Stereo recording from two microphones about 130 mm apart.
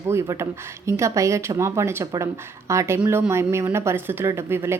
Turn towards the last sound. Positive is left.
turn(degrees=-20)  # may be behind; listen again after turning